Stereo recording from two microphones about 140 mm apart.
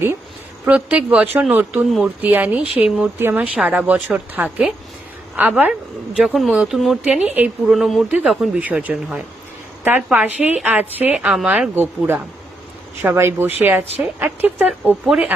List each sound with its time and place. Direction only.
0.6 s speech: 10° right (ahead or behind)
7.7 s speech: centre (ahead or behind)